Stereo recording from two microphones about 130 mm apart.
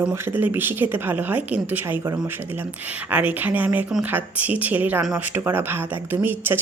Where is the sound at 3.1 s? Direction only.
10° right (ahead or behind).